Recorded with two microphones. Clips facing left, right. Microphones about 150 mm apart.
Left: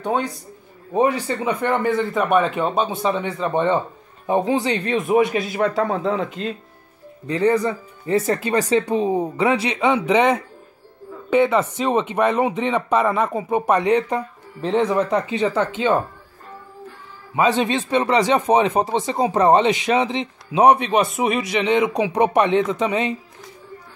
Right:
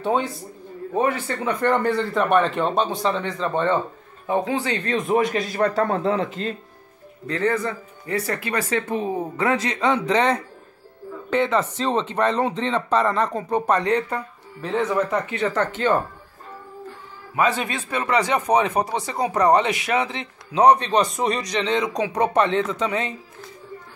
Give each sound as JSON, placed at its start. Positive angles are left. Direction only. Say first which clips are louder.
{"t": 0.0, "sound": "a man's voice", "louder": "even", "side_deg": -5}
{"t": 1.2, "sound": "speech", "louder": "left 1 dB", "side_deg": 15}
{"t": 4.9, "sound": "speech", "louder": "left 2 dB", "side_deg": 5}
{"t": 7.2, "sound": "a woman's voice", "louder": "left 4 dB", "side_deg": 15}
{"t": 17.4, "sound": "a man's voice", "louder": "left 4 dB", "side_deg": 25}